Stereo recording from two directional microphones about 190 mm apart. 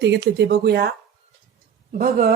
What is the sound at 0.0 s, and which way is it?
Speech, 65° right (ahead or behind).